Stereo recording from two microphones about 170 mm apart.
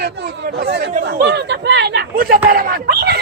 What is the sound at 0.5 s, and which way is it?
Speech, 80° right.